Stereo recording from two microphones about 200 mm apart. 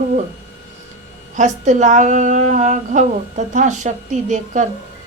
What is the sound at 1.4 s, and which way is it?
A woman's voice, 40° right (ahead or behind).